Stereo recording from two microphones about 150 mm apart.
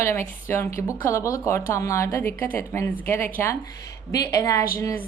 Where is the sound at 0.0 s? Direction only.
20° left (ahead or behind).